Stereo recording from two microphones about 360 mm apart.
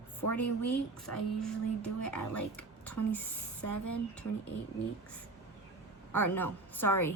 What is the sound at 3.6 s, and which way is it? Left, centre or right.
Speech, left.